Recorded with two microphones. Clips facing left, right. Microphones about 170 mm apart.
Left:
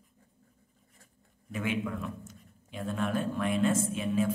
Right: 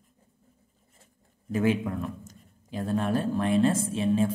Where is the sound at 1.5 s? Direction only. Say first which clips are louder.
Right 7 dB; 35° right (ahead or behind).